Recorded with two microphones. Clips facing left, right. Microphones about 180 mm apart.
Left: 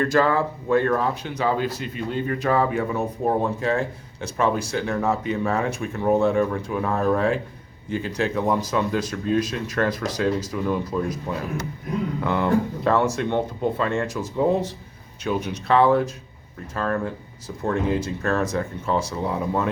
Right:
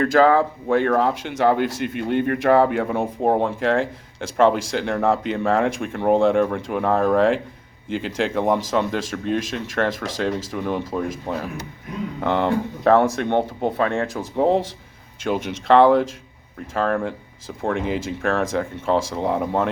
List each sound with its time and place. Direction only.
0.1 s speech: 90° right; by 3.3 s 60° right (ahead or behind)
3.4 s speech: 90° right; by 7.2 s 55° right (ahead or behind)
7.9 s speech: 90° right
9.2 s speech: 80° right
12.2 s speech: 65° right (ahead or behind)
15.2 s speech: 80° right
17.6 s speech: 85° right
18.6 s speech: 65° right (ahead or behind)